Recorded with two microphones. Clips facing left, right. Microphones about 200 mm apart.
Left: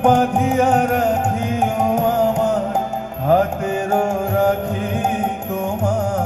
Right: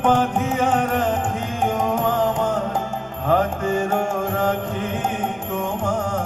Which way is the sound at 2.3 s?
40° left (ahead or behind).